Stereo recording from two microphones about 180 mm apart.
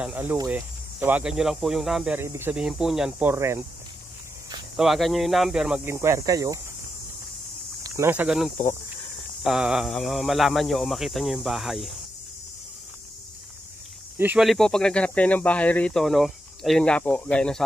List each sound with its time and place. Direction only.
0.0 s speech: 10° right (ahead or behind)
2.1 s speech: 15° right (ahead or behind)
4.7 s speech: centre (ahead or behind)
5.9 s speech: 15° right (ahead or behind)
7.8 s speech: 15° right (ahead or behind)
14.1 s speech: 10° right (ahead or behind)